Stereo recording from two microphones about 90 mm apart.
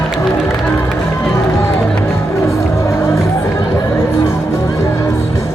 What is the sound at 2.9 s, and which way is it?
Music, 30° left (ahead or behind).